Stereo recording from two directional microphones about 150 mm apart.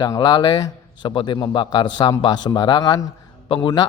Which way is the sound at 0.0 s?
25° left (ahead or behind).